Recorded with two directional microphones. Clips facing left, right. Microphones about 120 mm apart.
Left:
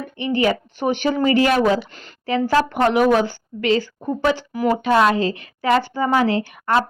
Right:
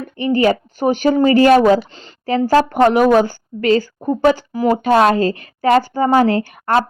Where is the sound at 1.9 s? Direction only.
30° right (ahead or behind).